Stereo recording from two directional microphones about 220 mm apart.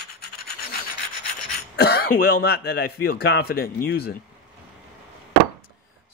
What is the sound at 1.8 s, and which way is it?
Speech, 45° left (ahead or behind).